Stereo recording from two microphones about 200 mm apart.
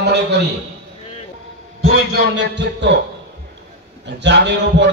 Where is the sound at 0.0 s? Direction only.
55° right (ahead or behind).